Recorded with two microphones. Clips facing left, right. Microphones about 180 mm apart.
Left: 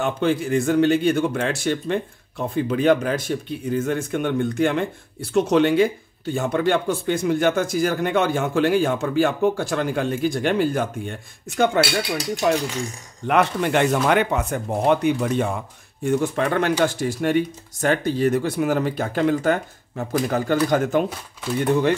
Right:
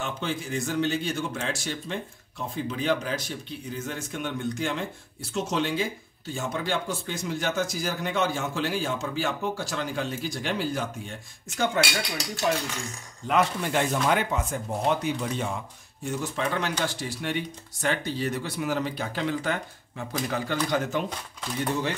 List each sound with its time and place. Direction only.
0.0 s a man's voice: 55° left (ahead or behind)
12.4 s a man's voice: 75° left (ahead or behind); by 21.0 s 50° left (ahead or behind)